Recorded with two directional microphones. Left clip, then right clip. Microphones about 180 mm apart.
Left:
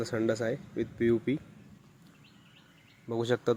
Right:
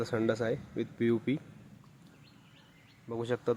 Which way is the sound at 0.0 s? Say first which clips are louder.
Left 1 dB; 5° left (ahead or behind).